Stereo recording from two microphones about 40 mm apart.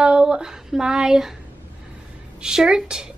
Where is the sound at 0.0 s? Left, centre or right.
Right.